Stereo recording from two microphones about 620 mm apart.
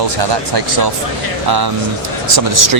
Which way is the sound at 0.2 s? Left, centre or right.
Right.